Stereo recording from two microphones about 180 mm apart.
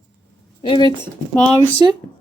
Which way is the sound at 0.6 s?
25° left (ahead or behind).